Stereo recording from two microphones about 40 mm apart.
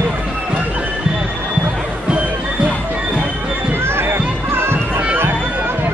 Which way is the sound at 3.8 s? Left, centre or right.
Right.